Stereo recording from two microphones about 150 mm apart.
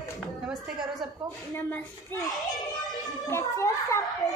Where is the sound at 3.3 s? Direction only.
20° left (ahead or behind).